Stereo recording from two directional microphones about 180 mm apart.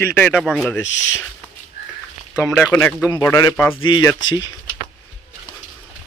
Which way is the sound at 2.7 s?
10° left (ahead or behind).